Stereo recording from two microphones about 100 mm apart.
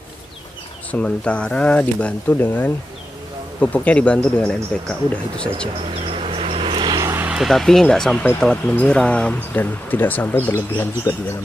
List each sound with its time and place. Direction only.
0.9 s speech: 15° left (ahead or behind)
6.1 s vehicle: 70° right (ahead or behind)
7.0 s vehicle: 30° right (ahead or behind)
7.2 s speech: centre (ahead or behind); by 11.1 s 20° left (ahead or behind)